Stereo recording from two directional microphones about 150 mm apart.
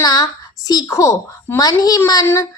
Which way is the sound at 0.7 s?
25° left (ahead or behind).